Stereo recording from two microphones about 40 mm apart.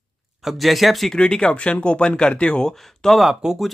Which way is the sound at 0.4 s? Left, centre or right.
Centre.